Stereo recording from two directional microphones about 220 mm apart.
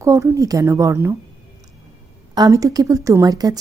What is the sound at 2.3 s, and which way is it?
A woman's voice, 15° right (ahead or behind).